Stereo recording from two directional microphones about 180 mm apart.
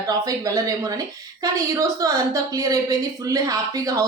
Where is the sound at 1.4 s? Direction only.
20° right (ahead or behind).